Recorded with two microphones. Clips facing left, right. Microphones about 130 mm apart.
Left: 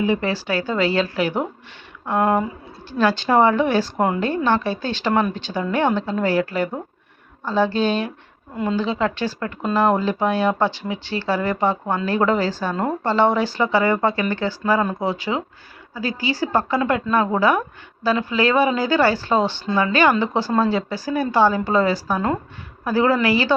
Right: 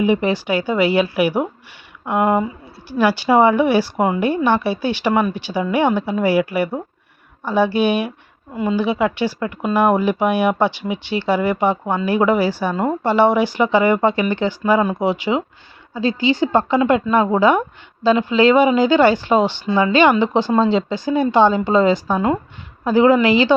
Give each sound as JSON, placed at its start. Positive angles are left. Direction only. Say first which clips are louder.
{"t": 0.0, "sound": "speech", "louder": "right 4 dB", "side_deg": -15}